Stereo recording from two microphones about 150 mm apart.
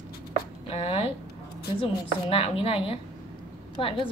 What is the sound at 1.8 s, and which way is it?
A woman's voice, 40° left (ahead or behind).